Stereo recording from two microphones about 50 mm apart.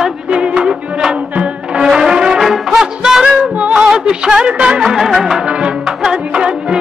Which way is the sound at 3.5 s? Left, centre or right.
Right.